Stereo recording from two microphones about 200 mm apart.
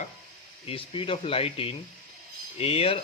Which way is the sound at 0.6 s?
25° left (ahead or behind).